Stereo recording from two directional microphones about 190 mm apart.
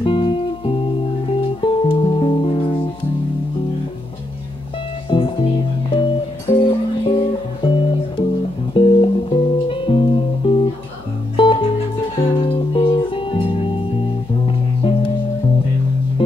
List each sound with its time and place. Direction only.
0.0 s music: 25° left (ahead or behind)
5.1 s music: 25° left (ahead or behind)